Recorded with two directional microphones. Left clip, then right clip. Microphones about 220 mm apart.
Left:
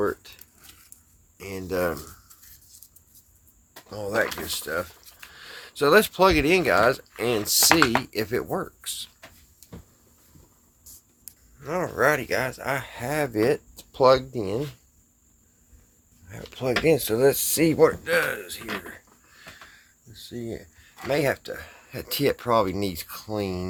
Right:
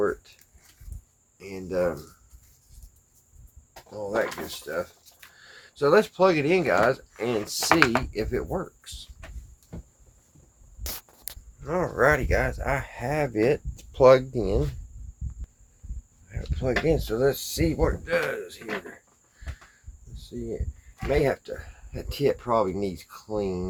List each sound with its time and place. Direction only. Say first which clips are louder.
0.0 s speech: even; 45° left (ahead or behind)
1.4 s speech: even; 45° left (ahead or behind)
3.8 s speech: left 2 dB; 50° left (ahead or behind)
11.6 s speech: even; 20° left (ahead or behind); by 14.7 s 5° left (ahead or behind)
16.6 s speech: left 3 dB; 25° left (ahead or behind); by 18.6 s 55° left (ahead or behind)
21.1 s speech: even; 50° left (ahead or behind)